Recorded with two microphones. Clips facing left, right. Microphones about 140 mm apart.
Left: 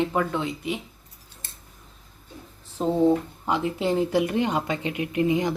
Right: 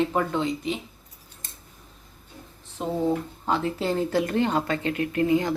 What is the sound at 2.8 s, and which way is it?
Speech, 25° left (ahead or behind).